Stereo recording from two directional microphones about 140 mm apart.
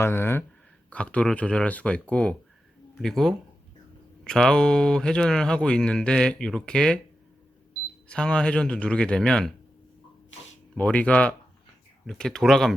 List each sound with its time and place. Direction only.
0.0 s speech: 15° left (ahead or behind)
8.0 s speech: 5° left (ahead or behind)
10.8 s speech: 10° left (ahead or behind)